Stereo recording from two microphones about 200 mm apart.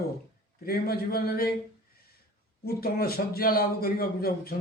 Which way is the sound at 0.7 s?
50° left (ahead or behind).